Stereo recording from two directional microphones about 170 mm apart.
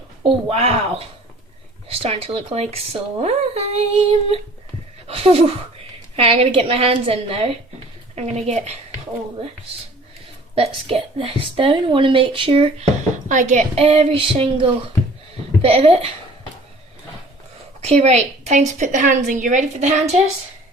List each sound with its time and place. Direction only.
0.2 s a woman's voice: 35° right (ahead or behind)
5.0 s a sound: 35° right (ahead or behind)
6.1 s a woman's voice: 35° right (ahead or behind)
10.5 s a woman's voice: 35° right (ahead or behind)
17.7 s a woman's voice: 40° right (ahead or behind)